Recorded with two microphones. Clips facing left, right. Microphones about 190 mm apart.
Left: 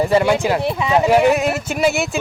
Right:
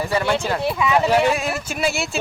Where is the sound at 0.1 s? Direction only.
15° left (ahead or behind).